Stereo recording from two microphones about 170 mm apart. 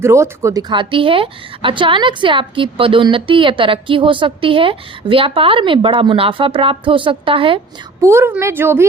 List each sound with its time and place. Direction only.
0.0 s a woman's voice: 15° right (ahead or behind); by 7.6 s 30° right (ahead or behind)
8.0 s a woman's voice: 15° right (ahead or behind)